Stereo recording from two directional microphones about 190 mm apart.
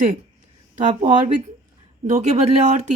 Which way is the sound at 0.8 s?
40° right (ahead or behind).